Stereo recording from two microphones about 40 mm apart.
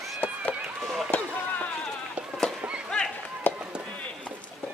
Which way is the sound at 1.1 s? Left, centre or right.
Left.